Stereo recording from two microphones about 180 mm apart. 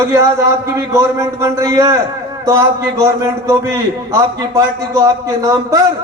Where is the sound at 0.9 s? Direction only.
15° right (ahead or behind).